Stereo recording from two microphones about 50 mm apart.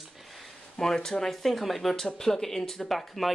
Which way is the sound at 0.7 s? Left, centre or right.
Centre.